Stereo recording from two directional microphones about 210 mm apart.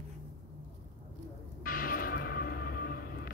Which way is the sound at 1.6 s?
45° left (ahead or behind).